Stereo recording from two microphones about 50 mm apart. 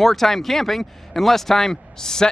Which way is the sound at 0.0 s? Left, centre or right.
Centre.